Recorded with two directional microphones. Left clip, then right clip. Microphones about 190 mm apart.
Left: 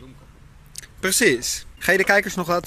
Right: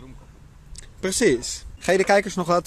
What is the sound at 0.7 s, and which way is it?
Speech, 10° right (ahead or behind).